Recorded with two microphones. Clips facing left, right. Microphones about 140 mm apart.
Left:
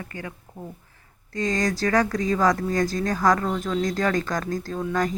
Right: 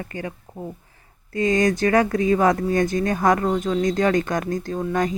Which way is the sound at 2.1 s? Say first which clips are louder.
Right 4 dB; 55° right (ahead or behind).